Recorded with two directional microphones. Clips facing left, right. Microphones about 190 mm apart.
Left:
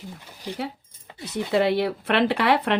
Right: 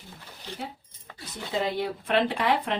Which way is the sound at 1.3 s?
70° left (ahead or behind).